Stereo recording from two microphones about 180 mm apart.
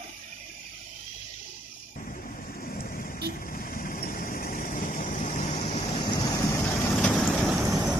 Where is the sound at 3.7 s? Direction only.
50° left (ahead or behind); by 6.6 s 25° left (ahead or behind).